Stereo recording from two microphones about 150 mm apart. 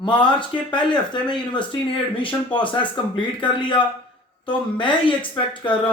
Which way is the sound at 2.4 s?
35° left (ahead or behind).